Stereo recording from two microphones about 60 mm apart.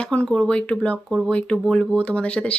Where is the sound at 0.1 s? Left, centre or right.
Centre.